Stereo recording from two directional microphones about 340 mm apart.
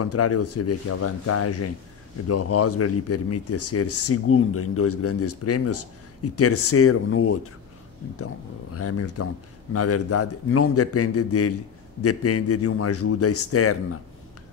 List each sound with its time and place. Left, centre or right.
0.0 s speech: left
8.7 s speech: left